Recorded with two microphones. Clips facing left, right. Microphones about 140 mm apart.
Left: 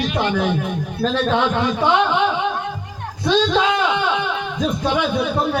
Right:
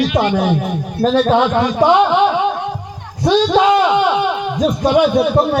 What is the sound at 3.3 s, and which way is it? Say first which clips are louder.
Speech: right 5 dB; 45° right (ahead or behind).